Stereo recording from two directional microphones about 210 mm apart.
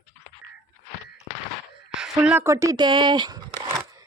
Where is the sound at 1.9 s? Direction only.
5° right (ahead or behind).